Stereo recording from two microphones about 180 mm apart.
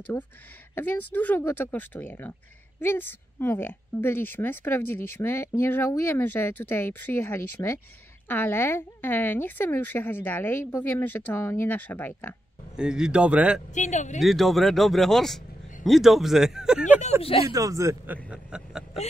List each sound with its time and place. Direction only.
0.7 s speech: 10° left (ahead or behind)
12.7 s speech: 5° right (ahead or behind)
13.7 s speech: 40° left (ahead or behind)
14.2 s speech: centre (ahead or behind)
17.2 s speech: 30° left (ahead or behind)
17.5 s speech: 20° right (ahead or behind)